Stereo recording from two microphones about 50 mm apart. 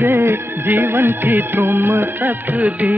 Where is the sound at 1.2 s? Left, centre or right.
Right.